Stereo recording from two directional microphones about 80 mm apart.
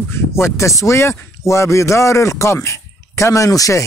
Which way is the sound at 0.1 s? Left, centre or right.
Left.